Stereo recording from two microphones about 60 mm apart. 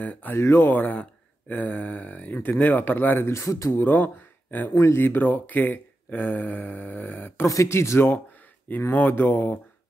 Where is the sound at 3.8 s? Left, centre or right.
Left.